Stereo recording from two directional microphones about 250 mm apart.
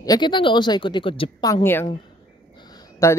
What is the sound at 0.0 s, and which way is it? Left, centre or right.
Speech, centre.